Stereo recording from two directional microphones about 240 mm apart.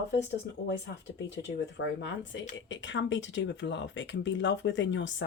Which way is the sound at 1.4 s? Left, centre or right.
Left.